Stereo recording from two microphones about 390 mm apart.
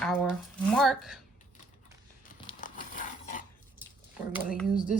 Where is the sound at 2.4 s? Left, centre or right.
Left.